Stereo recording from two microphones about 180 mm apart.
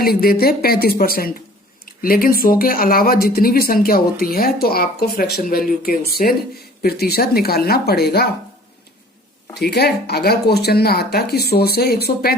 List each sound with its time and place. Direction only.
0.0 s speech: 55° left (ahead or behind)
9.6 s speech: 65° left (ahead or behind)